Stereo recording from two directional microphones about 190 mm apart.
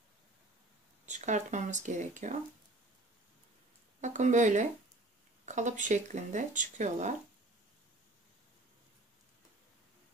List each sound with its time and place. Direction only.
1.0 s speech: 40° right (ahead or behind)
4.0 s speech: 40° right (ahead or behind)